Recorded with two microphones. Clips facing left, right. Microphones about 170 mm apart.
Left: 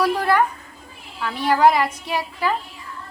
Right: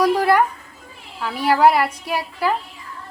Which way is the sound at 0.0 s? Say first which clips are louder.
Right 3 dB; 10° right (ahead or behind).